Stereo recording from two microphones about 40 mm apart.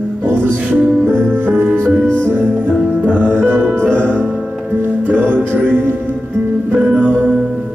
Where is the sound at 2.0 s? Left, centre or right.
Left.